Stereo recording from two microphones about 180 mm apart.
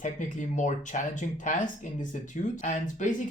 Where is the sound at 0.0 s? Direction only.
45° left (ahead or behind).